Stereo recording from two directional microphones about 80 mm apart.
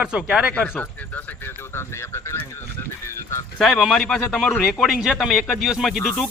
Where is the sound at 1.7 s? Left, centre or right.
Left.